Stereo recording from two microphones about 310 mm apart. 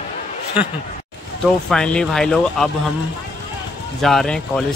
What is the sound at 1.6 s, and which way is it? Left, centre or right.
Speech, centre.